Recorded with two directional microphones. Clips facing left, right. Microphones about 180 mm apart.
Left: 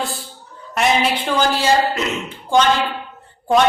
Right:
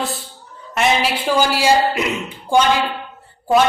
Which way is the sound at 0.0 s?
Centre (ahead or behind).